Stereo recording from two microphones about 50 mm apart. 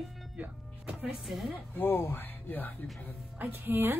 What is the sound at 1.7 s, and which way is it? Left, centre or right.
Speech, left.